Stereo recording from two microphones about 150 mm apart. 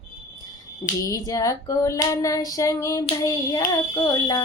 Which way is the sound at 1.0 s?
20° left (ahead or behind).